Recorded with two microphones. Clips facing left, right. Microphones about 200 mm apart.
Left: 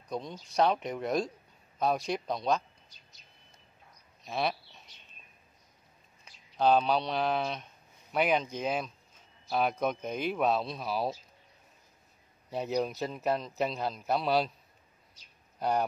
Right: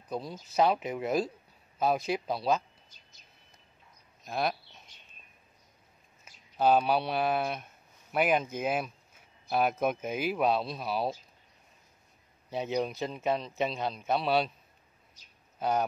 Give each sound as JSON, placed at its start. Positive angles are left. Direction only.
{"t": 0.1, "sound": "a man's voice", "side_deg": -5}
{"t": 4.2, "sound": "speech", "side_deg": 0}
{"t": 6.5, "sound": "speech", "side_deg": -5}
{"t": 12.4, "sound": "a man's voice", "side_deg": 0}